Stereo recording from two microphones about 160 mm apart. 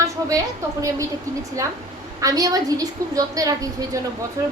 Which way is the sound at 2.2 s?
20° right (ahead or behind).